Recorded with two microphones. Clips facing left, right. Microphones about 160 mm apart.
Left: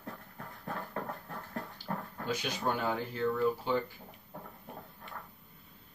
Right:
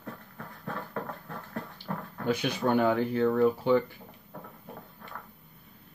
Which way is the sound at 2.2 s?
60° right (ahead or behind).